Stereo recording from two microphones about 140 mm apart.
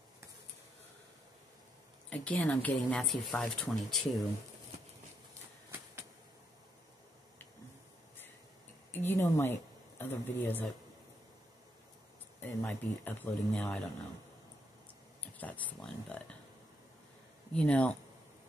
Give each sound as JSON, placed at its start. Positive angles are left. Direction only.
{"t": 2.0, "sound": "speech", "side_deg": 5}
{"t": 8.9, "sound": "speech", "side_deg": 15}
{"t": 12.4, "sound": "speech", "side_deg": 15}
{"t": 15.3, "sound": "speech", "side_deg": 10}
{"t": 17.6, "sound": "speech", "side_deg": 10}